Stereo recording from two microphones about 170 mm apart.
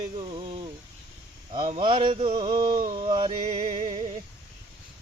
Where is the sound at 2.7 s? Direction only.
50° right (ahead or behind).